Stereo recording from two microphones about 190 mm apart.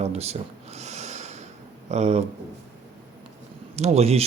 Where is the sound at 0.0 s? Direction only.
35° right (ahead or behind).